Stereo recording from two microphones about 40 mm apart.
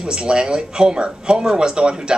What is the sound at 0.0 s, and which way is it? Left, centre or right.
Speech, right.